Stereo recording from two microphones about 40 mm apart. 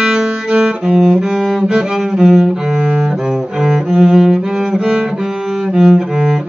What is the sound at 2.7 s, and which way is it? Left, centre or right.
Cello, right.